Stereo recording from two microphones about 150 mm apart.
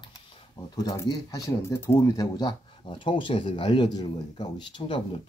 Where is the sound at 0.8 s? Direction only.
25° left (ahead or behind).